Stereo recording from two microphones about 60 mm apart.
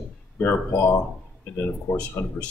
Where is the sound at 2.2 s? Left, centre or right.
Left.